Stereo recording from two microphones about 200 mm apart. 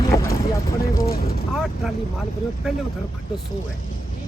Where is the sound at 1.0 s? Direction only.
50° left (ahead or behind).